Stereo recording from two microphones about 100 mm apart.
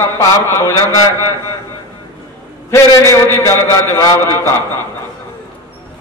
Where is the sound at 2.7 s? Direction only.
30° left (ahead or behind).